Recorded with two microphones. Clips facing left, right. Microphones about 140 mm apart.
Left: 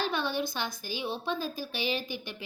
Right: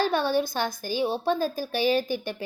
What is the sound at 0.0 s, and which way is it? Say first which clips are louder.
A woman's voice: right 7 dB; 45° right (ahead or behind).